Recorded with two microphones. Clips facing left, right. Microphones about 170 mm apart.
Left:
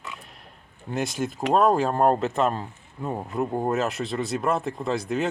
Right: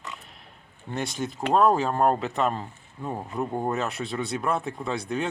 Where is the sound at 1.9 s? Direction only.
35° left (ahead or behind).